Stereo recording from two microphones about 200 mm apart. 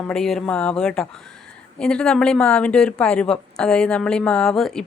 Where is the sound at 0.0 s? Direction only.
Centre (ahead or behind).